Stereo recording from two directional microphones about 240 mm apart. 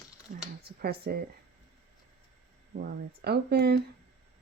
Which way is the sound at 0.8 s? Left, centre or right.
Right.